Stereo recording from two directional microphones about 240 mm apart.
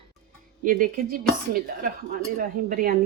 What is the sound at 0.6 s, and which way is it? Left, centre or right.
Speech, right.